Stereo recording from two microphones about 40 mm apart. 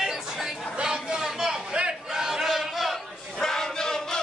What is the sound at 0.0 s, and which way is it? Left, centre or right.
Chatter, centre.